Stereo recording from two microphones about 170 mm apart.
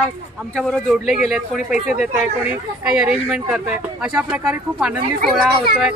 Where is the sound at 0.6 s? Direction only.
Centre (ahead or behind).